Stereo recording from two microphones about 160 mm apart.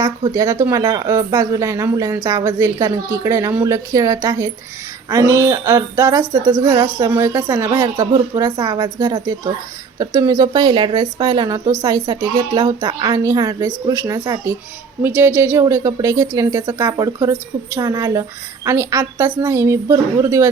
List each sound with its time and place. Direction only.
0.2 s a woman's voice: 25° right (ahead or behind)